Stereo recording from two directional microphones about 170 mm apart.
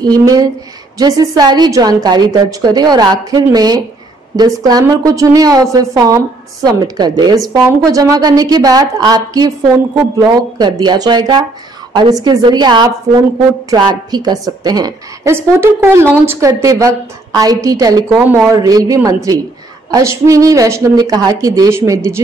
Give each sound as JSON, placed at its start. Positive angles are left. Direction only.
{"t": 0.0, "sound": "a woman's voice", "side_deg": -20}
{"t": 18.2, "sound": "a man's voice", "side_deg": -10}
{"t": 18.5, "sound": "a woman's voice", "side_deg": -20}